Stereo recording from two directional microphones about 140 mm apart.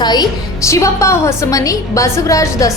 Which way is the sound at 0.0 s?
30° left (ahead or behind).